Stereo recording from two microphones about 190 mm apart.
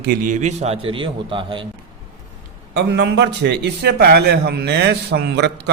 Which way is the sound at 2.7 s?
65° right (ahead or behind).